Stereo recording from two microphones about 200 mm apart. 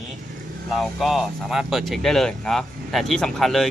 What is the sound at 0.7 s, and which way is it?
Speech, centre (ahead or behind).